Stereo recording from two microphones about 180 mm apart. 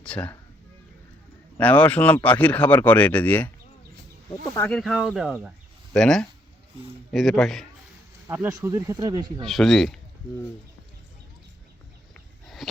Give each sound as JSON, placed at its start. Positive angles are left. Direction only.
{"t": 0.0, "sound": "speech", "side_deg": 5}
{"t": 1.5, "sound": "speech", "side_deg": 10}
{"t": 4.7, "sound": "speech", "side_deg": 0}
{"t": 8.3, "sound": "speech", "side_deg": -15}
{"t": 9.4, "sound": "speech", "side_deg": 0}